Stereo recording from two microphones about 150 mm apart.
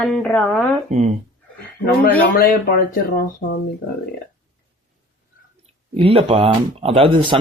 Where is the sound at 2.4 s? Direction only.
70° left (ahead or behind).